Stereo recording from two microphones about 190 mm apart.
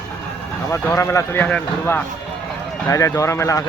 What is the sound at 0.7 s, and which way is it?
Speech, 15° left (ahead or behind).